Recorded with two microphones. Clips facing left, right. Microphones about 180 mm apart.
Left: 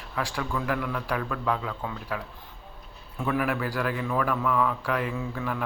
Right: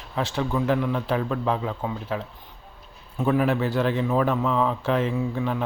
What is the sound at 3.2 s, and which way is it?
Speech, 25° right (ahead or behind).